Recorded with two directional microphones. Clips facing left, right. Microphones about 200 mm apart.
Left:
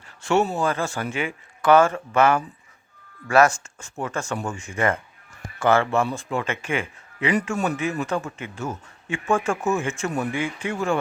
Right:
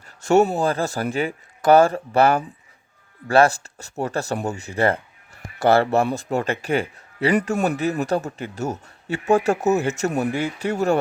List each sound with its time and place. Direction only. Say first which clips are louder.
0.2 s speech: right 4 dB; 40° right (ahead or behind)